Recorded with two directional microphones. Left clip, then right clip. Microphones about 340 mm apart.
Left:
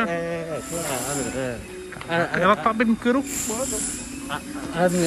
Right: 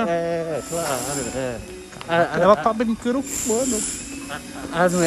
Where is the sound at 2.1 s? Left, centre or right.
Centre.